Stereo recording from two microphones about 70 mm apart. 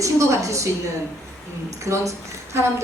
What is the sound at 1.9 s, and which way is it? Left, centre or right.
Speech, right.